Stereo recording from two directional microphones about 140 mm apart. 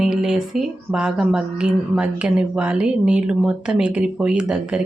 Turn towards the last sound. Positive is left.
turn(degrees=-5)  # may be behind; listen again after turning